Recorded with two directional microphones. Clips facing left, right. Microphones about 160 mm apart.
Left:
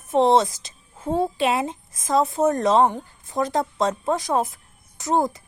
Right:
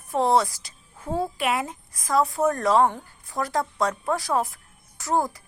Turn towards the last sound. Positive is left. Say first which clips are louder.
# left 3 dB
turn(degrees=20)  # may be behind; listen again after turning